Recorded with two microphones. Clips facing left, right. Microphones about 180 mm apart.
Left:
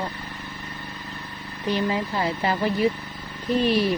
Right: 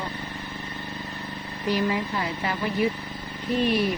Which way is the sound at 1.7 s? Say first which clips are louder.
Left 1 dB; 25° left (ahead or behind).